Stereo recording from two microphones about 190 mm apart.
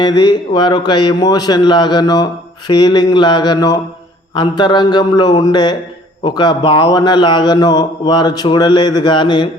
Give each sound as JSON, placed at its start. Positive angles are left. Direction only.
{"t": 0.0, "sound": "a man's voice", "side_deg": 25}